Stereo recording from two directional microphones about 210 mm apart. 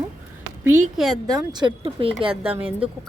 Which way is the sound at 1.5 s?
25° right (ahead or behind).